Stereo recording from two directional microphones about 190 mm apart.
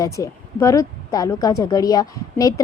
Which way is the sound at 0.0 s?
15° left (ahead or behind).